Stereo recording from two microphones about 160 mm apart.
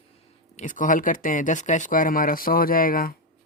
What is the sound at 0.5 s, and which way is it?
Speech, 55° left (ahead or behind).